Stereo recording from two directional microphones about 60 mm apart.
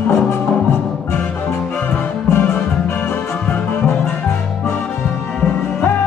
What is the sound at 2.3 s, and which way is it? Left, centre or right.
Music, left.